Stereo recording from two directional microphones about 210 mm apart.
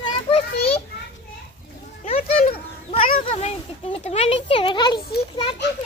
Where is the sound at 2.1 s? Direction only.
30° left (ahead or behind).